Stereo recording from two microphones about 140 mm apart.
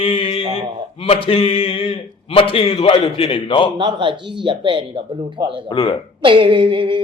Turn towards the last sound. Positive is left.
turn(degrees=-35)  # may be behind; listen again after turning